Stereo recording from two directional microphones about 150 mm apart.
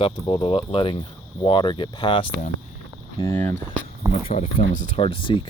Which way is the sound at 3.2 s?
15° left (ahead or behind).